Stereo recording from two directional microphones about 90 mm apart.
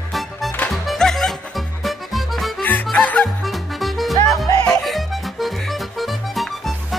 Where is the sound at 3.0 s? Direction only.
15° left (ahead or behind).